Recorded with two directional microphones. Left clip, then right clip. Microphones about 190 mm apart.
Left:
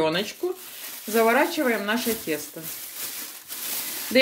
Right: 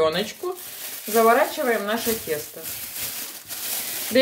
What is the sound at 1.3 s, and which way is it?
Speech, 45° left (ahead or behind).